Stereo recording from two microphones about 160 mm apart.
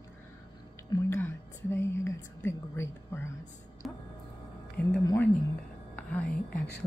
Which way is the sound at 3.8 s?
Centre (ahead or behind).